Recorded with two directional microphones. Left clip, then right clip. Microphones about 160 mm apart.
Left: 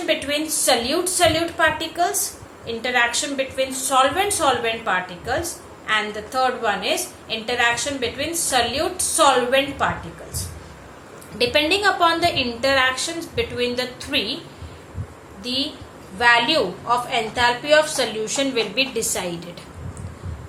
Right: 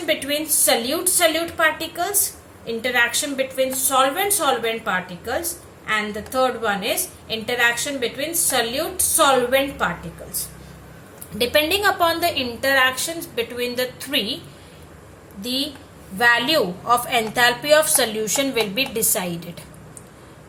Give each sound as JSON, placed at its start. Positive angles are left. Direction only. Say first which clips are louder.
{"t": 0.0, "sound": "a woman's voice", "louder": "left 1 dB", "side_deg": -30}
{"t": 11.3, "sound": "a woman's voice", "louder": "even", "side_deg": -35}
{"t": 15.4, "sound": "a woman's voice", "louder": "even", "side_deg": -40}